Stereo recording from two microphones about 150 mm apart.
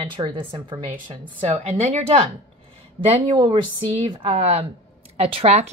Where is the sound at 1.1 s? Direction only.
45° right (ahead or behind).